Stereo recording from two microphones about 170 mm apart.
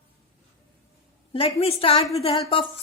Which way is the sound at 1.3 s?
35° left (ahead or behind).